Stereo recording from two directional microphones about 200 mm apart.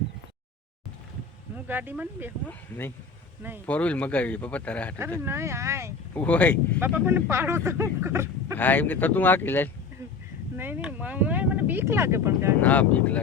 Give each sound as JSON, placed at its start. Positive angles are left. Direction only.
{"t": 1.6, "sound": "speech", "side_deg": -10}
{"t": 2.5, "sound": "speech", "side_deg": 10}
{"t": 5.2, "sound": "speech", "side_deg": -15}
{"t": 6.1, "sound": "speech", "side_deg": 5}
{"t": 6.7, "sound": "speech", "side_deg": -10}
{"t": 8.5, "sound": "speech", "side_deg": 10}
{"t": 10.6, "sound": "speech", "side_deg": -10}
{"t": 12.6, "sound": "speech", "side_deg": 5}